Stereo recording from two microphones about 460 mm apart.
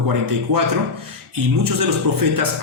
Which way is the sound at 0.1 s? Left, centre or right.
Right.